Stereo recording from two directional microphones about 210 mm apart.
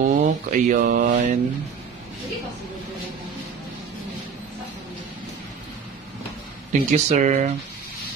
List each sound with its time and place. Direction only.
0.0 s mantra: 35° right (ahead or behind)
6.7 s mantra: 35° right (ahead or behind)